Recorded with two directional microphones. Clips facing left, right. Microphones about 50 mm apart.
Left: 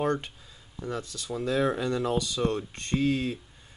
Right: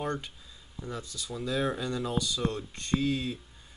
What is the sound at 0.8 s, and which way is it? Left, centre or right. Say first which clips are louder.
Speech: left 5 dB; left.